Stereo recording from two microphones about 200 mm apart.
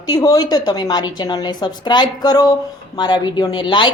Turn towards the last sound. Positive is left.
turn(degrees=25)  # may be behind; listen again after turning